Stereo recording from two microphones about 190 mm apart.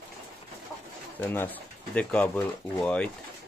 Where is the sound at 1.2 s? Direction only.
10° left (ahead or behind).